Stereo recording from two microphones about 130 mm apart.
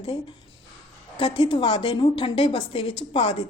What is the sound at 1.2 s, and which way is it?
A woman's voice, 40° left (ahead or behind).